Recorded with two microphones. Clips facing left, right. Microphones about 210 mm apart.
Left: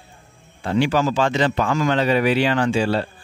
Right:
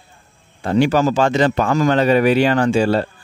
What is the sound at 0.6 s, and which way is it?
A man's voice, 45° right (ahead or behind).